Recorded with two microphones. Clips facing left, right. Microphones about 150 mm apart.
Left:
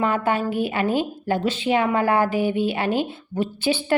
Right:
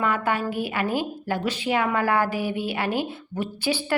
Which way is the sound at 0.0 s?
25° left (ahead or behind).